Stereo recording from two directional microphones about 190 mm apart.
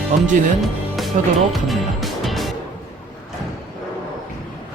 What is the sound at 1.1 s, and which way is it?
Speech, 45° right (ahead or behind).